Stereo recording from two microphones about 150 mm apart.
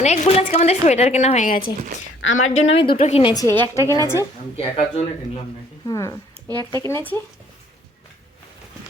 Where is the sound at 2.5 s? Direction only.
40° left (ahead or behind).